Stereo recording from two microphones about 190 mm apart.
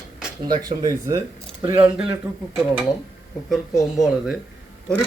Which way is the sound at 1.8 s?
5° right (ahead or behind).